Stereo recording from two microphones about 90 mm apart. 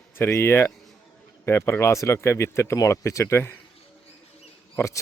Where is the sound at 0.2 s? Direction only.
30° left (ahead or behind).